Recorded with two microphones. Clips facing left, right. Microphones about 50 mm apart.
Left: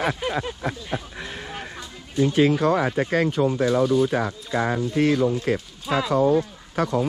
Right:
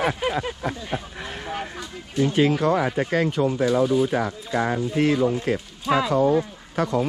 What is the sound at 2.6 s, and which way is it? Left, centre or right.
Speech, left.